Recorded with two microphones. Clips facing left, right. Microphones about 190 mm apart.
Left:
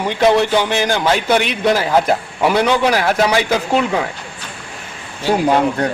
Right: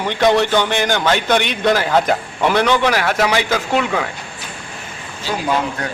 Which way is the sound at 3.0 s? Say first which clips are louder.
Left 2 dB; 30° left (ahead or behind).